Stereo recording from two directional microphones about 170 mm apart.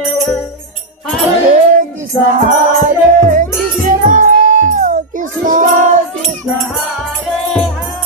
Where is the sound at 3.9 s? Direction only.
50° right (ahead or behind).